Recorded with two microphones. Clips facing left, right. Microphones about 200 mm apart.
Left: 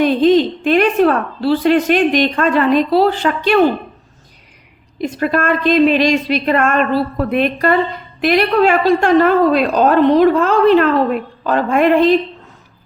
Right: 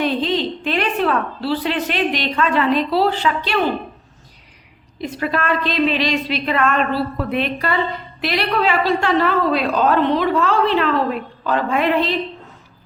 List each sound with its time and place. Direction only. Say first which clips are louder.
0.0 s a woman's voice: left 8 dB; 45° left (ahead or behind)
5.1 s a woman's voice: left 4 dB; 50° left (ahead or behind)